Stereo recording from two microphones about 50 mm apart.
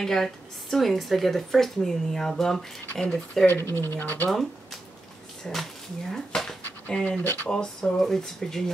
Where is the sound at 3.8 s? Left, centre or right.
Left.